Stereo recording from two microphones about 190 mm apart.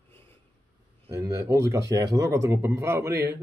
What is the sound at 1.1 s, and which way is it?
Speech, 15° right (ahead or behind).